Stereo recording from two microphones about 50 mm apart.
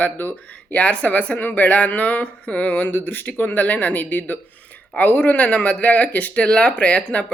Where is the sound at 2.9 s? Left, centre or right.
Left.